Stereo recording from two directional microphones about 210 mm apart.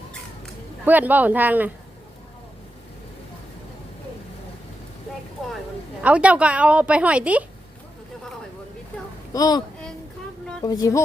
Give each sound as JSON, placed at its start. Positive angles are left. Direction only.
{"t": 0.9, "sound": "speech", "side_deg": -10}
{"t": 6.0, "sound": "a woman's voice", "side_deg": -5}
{"t": 9.3, "sound": "speech", "side_deg": 20}